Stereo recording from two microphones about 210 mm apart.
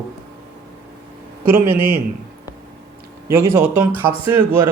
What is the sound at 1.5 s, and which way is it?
Speech, 10° right (ahead or behind).